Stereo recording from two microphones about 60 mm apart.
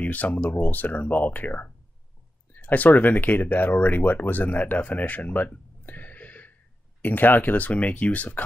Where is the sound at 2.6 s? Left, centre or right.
Left.